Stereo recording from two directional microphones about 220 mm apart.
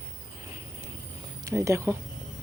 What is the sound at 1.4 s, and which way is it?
Speech, 15° right (ahead or behind).